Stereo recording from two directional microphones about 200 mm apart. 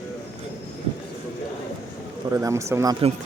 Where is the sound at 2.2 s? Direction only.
15° right (ahead or behind).